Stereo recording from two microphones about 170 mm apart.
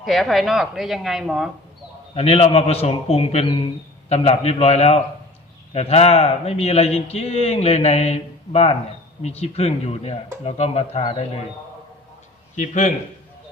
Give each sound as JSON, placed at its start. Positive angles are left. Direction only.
{"t": 0.0, "sound": "speech", "side_deg": 0}
{"t": 2.1, "sound": "a man's voice", "side_deg": 40}
{"t": 12.5, "sound": "a man's voice", "side_deg": 45}